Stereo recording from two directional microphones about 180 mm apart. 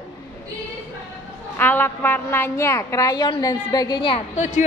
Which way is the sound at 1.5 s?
10° left (ahead or behind).